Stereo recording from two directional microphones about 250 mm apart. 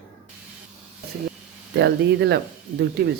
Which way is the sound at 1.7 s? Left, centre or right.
Right.